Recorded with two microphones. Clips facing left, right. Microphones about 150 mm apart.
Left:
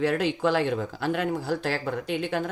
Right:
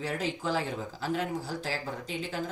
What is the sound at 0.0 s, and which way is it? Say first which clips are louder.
Speech: left 8 dB; 65° left (ahead or behind).